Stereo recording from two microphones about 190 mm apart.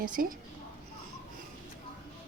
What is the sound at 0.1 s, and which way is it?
Speech, 45° right (ahead or behind).